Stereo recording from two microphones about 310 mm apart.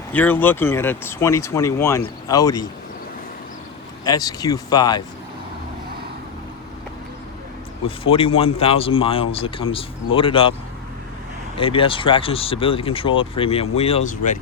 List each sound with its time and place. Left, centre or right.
0.1 s speech: centre
4.0 s speech: centre
7.9 s speech: centre
11.5 s speech: centre